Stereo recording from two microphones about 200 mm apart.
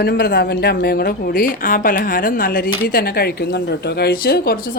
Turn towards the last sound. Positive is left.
turn(degrees=50)  # may be behind; listen again after turning